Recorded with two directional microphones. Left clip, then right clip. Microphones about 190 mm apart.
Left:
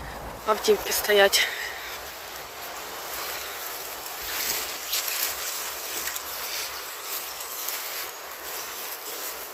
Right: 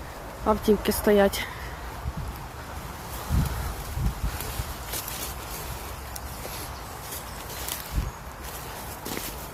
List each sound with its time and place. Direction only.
0.4 s speech: 15° right (ahead or behind)